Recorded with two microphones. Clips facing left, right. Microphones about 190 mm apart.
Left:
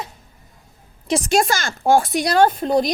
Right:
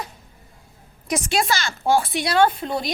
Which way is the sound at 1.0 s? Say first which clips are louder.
Left 4 dB; 30° left (ahead or behind).